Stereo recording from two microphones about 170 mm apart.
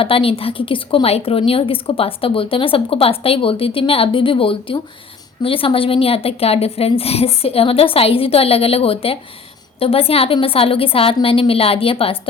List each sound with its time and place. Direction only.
0.0 s a woman's voice: 35° left (ahead or behind)